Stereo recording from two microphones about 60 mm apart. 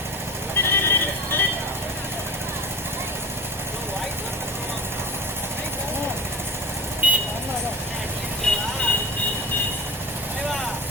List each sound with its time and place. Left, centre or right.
0.6 s vehicle: left
7.0 s vehicle: right
8.5 s vehicle: centre